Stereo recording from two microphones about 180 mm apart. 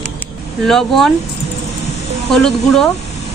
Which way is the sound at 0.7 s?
Centre (ahead or behind).